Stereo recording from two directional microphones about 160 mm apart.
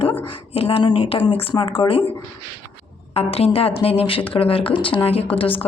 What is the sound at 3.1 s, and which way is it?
A woman's voice, 40° left (ahead or behind).